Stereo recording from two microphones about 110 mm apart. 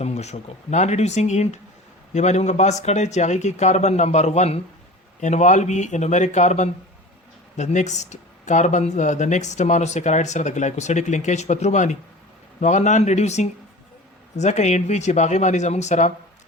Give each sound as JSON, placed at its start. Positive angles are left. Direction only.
{"t": 0.0, "sound": "speech", "side_deg": 85}
{"t": 5.2, "sound": "speech", "side_deg": 90}